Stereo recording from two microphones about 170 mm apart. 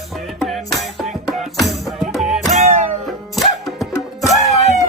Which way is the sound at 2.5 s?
40° right (ahead or behind).